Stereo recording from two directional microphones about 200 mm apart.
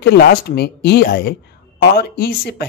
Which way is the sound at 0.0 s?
50° left (ahead or behind).